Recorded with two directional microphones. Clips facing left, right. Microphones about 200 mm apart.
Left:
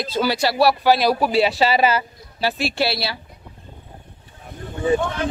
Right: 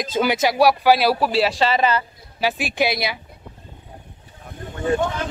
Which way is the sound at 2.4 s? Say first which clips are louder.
Even; 15° right (ahead or behind).